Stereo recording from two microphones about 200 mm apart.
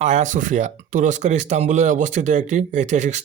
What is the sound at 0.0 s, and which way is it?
Speech, 35° right (ahead or behind).